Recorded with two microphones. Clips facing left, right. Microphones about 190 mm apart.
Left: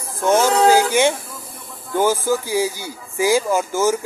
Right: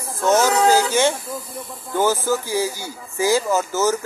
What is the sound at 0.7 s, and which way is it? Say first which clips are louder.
Speech: left 2 dB; 15° left (ahead or behind).